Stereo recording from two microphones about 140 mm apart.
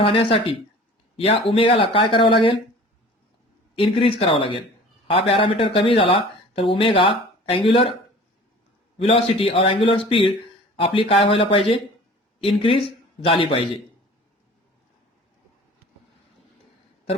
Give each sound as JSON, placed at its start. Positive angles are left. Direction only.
{"t": 0.0, "sound": "speech", "side_deg": 40}
{"t": 3.8, "sound": "speech", "side_deg": 40}
{"t": 9.0, "sound": "speech", "side_deg": 45}